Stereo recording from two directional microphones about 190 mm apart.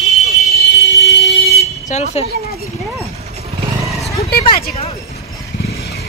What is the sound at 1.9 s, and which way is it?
Speech, 35° left (ahead or behind).